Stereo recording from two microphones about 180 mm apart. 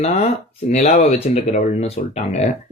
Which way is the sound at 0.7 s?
40° left (ahead or behind).